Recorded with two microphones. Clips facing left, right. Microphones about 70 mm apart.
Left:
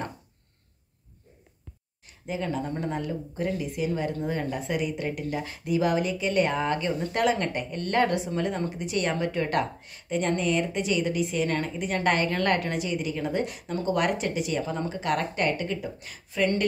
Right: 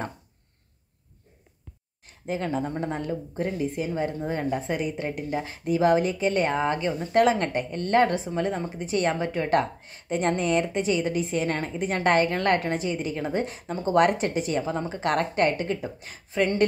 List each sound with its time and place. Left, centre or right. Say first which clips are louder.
2.0 s a woman's voice: right 2 dB; right
13.9 s a woman's voice: right 8 dB; right